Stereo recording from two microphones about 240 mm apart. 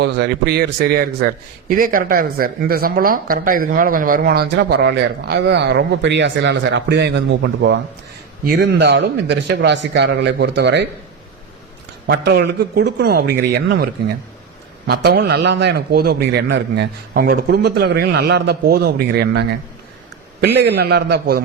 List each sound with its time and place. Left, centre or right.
0.0 s a man's voice: right
12.0 s a man's voice: right